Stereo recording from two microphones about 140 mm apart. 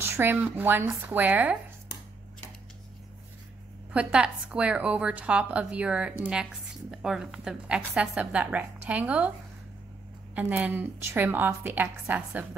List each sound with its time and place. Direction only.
0.0 s a woman's voice: 15° right (ahead or behind)
3.9 s a woman's voice: 5° right (ahead or behind)
10.3 s a woman's voice: 10° right (ahead or behind)